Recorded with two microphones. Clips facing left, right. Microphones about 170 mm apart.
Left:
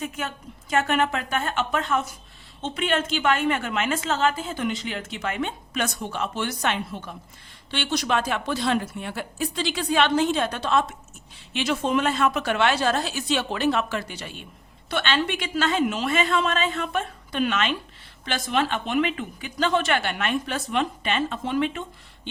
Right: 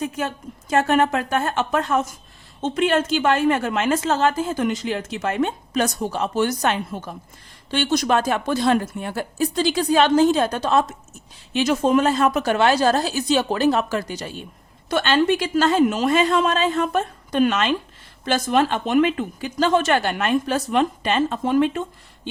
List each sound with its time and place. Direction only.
0.0 s a woman's voice: 35° right (ahead or behind)